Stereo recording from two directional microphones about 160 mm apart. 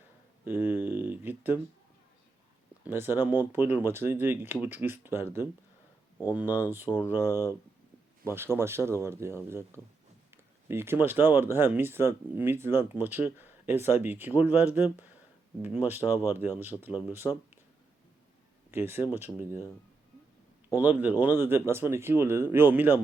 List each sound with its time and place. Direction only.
0.4 s a sound: 15° right (ahead or behind)
2.8 s speech: 15° right (ahead or behind)
6.8 s speech: 20° left (ahead or behind)
7.1 s speech: 15° right (ahead or behind)
18.7 s speech: 15° right (ahead or behind)
20.7 s speech: 10° right (ahead or behind)